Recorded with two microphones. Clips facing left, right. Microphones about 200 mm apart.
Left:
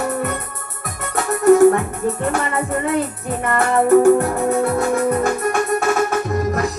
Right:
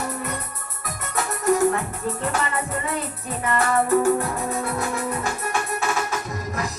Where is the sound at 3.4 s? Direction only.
50° left (ahead or behind).